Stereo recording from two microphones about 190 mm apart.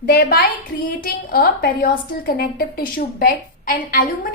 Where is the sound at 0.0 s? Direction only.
50° left (ahead or behind).